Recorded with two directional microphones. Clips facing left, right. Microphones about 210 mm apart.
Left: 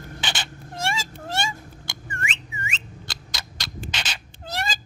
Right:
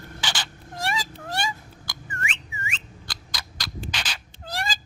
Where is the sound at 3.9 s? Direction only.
25° left (ahead or behind).